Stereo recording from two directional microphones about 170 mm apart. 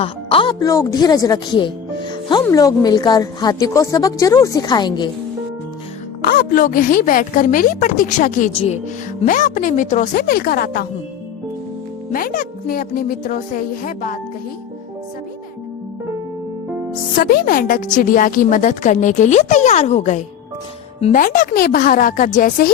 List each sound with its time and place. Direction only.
0.0 s speech: 30° left (ahead or behind)
0.6 s a woman's voice: 20° left (ahead or behind)
6.2 s a woman's voice: 55° left (ahead or behind)
8.5 s speech: 35° left (ahead or behind)
9.2 s a woman's voice: 50° left (ahead or behind)
12.1 s a woman's voice: 55° left (ahead or behind)
17.2 s a woman's voice: 60° left (ahead or behind)
21.1 s a woman's voice: 55° left (ahead or behind)